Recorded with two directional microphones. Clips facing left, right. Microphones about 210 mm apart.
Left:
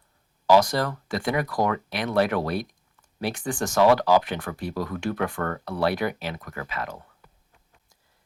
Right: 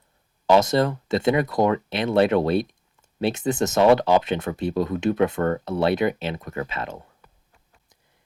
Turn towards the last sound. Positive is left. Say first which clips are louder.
# right 4 dB
turn(degrees=-25)  # may be behind; listen again after turning